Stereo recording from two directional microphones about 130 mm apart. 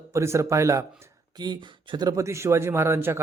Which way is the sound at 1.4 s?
35° right (ahead or behind).